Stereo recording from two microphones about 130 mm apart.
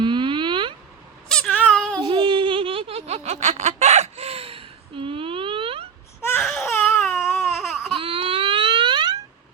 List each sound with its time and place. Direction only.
0.0 s a sound: 40° right (ahead or behind)
1.3 s cat: 5° left (ahead or behind)
1.6 s child singing: 5° left (ahead or behind)
2.0 s a sound: 35° right (ahead or behind)
6.4 s baby cry: 5° left (ahead or behind)
6.7 s baby cry: 15° left (ahead or behind)
7.5 s baby cry: 5° right (ahead or behind)
7.9 s baby cry: 40° right (ahead or behind)